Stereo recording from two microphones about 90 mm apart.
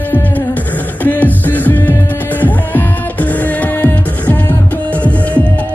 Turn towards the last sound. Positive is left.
turn(degrees=15)  # may be behind; listen again after turning